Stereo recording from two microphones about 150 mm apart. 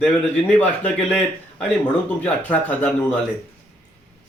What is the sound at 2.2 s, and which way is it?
Speech, 10° left (ahead or behind).